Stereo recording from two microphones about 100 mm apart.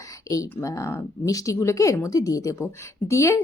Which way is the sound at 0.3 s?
35° left (ahead or behind).